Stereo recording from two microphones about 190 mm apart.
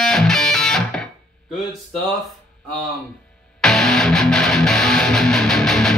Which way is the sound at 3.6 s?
Centre (ahead or behind).